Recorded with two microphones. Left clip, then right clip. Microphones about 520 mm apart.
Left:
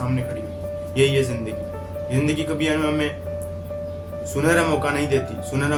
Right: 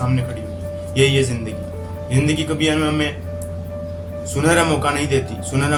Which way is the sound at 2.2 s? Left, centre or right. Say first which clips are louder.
Right 4 dB; left.